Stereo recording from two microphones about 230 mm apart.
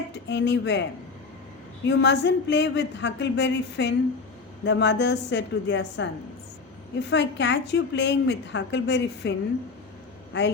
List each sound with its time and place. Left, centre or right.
0.1 s a woman's voice: left
7.1 s a woman's voice: left
10.3 s a woman's voice: left